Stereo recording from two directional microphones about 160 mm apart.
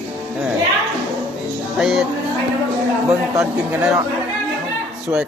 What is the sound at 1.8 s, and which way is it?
Speech, 5° right (ahead or behind).